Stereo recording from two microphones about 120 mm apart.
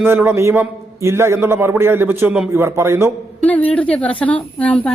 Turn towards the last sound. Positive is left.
turn(degrees=10)  # may be behind; listen again after turning